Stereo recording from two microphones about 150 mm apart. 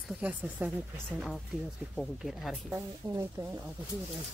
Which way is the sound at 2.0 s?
Centre (ahead or behind).